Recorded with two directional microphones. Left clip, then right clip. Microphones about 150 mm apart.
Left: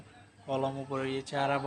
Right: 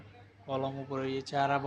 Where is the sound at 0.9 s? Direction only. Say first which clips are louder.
Even; 10° right (ahead or behind).